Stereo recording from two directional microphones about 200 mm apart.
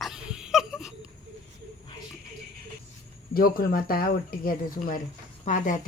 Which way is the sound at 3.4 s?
45° left (ahead or behind).